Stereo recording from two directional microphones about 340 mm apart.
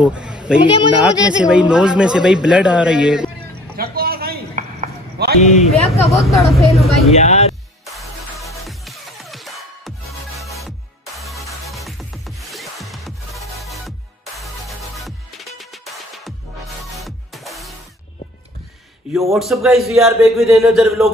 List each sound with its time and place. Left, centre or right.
0.0 s a man's voice: centre
0.6 s speech: centre
1.0 s speech: centre
3.7 s a sound: right
5.4 s speech: centre
6.2 s speech: centre
7.8 s music: centre
11.1 s music: centre
19.1 s speech: centre